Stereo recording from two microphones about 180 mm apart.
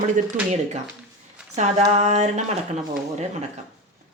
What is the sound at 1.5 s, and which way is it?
Speech, 40° right (ahead or behind).